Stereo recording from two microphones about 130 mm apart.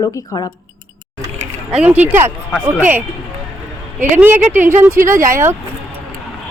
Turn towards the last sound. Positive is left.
turn(degrees=-20)  # may be behind; listen again after turning